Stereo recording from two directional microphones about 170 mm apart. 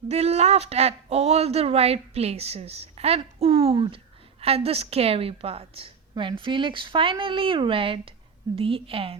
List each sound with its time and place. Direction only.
0.1 s speech: 35° right (ahead or behind)